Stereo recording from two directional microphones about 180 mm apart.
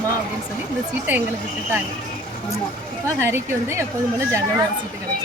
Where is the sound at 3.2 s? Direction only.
15° right (ahead or behind).